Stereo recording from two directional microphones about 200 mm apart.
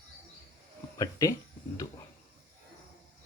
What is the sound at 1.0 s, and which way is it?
Speech, 15° left (ahead or behind).